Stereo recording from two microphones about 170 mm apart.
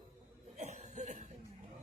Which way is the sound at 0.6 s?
45° right (ahead or behind).